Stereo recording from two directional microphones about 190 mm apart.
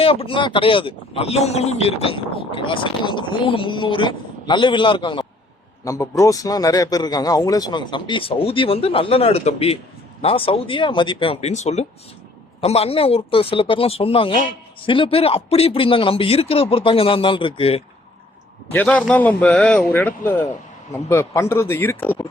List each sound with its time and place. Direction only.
0.0 s a man's voice: 30° left (ahead or behind)
18.7 s a man's voice: 5° left (ahead or behind)